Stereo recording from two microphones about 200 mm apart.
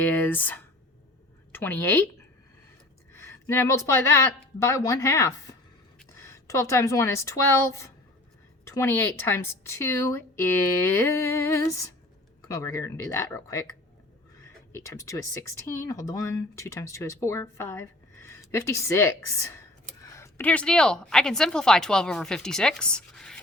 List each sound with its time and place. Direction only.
0.0 s a woman's voice: 10° left (ahead or behind)
3.1 s a woman's voice: 15° left (ahead or behind)
14.7 s a woman's voice: 15° left (ahead or behind)